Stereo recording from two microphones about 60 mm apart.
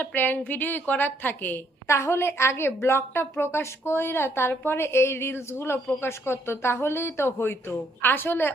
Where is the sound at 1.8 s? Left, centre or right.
Left.